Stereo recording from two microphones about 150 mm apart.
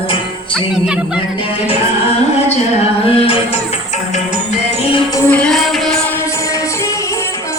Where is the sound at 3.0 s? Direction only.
40° left (ahead or behind).